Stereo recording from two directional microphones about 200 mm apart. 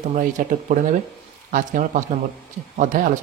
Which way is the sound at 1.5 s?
40° right (ahead or behind).